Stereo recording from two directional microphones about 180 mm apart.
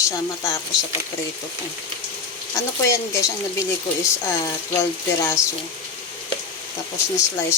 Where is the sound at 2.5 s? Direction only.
15° left (ahead or behind).